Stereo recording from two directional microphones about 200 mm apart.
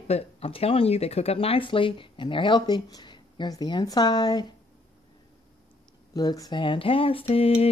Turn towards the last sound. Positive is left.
turn(degrees=30)  # may be behind; listen again after turning